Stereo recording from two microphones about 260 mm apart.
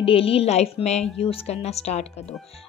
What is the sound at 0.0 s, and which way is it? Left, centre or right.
A woman's voice, left.